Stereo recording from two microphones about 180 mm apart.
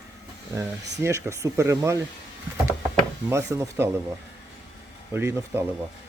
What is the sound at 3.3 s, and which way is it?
Speech, 15° right (ahead or behind).